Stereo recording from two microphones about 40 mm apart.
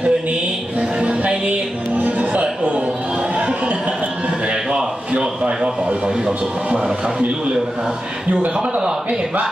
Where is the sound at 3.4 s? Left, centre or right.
Right.